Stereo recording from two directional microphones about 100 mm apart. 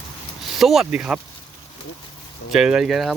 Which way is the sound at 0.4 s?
Centre (ahead or behind).